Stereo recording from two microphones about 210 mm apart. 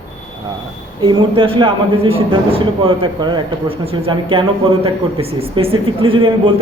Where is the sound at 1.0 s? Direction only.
25° right (ahead or behind).